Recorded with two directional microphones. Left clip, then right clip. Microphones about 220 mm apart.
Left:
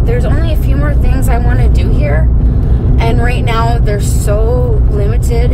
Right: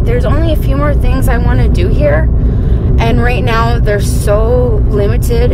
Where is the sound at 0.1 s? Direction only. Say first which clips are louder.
Right 4 dB; 45° right (ahead or behind).